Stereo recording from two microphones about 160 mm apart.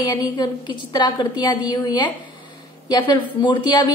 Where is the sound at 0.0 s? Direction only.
25° left (ahead or behind).